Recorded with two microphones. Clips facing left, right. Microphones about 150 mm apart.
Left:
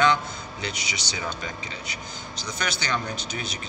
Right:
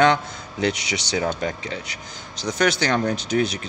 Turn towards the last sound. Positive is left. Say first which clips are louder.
# right 11 dB
turn(degrees=-85)